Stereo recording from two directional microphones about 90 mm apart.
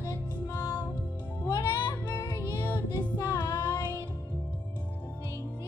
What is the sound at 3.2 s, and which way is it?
Child singing, 45° left (ahead or behind).